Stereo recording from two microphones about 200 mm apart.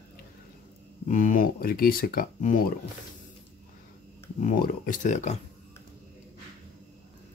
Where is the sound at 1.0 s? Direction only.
40° left (ahead or behind).